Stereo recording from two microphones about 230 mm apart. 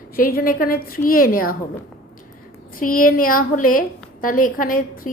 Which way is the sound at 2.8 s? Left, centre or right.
Left.